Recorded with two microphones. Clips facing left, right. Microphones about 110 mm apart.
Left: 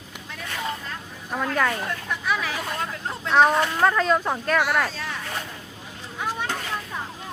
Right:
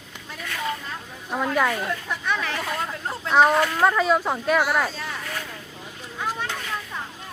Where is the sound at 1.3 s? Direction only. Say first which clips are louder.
Right 1 dB; 10° right (ahead or behind).